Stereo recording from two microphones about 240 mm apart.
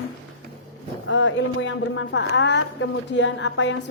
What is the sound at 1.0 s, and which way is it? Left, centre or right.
A woman's voice, left.